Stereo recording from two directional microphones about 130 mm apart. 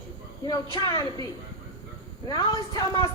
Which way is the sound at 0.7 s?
30° left (ahead or behind).